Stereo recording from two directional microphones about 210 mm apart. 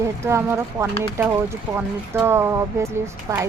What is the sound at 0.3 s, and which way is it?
Speech, 15° right (ahead or behind).